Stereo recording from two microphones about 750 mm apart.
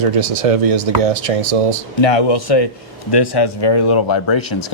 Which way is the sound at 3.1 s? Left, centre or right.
Left.